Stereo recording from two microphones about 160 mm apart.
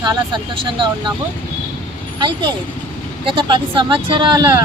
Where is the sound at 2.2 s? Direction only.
25° right (ahead or behind).